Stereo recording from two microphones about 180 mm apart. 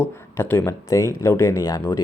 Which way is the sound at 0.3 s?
10° left (ahead or behind).